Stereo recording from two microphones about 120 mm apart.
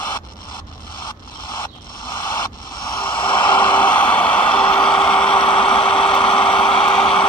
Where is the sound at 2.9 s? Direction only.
45° left (ahead or behind).